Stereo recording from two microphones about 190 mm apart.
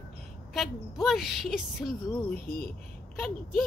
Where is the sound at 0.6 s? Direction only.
Centre (ahead or behind).